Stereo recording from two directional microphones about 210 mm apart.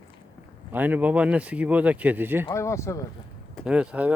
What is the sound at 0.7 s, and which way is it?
Speech, 10° right (ahead or behind).